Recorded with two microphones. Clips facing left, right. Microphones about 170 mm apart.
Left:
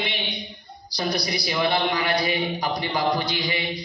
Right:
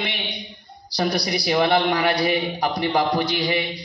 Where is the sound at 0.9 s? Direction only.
70° right (ahead or behind).